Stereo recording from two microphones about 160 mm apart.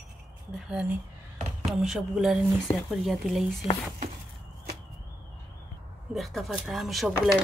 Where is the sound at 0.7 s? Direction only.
5° right (ahead or behind).